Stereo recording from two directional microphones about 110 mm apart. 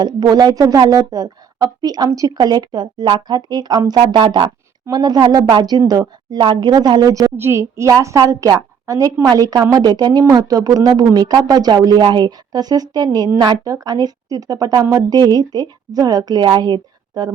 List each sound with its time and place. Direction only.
0.0 s speech: 40° right (ahead or behind)
7.3 s a woman's voice: 25° right (ahead or behind); by 17.3 s 40° right (ahead or behind)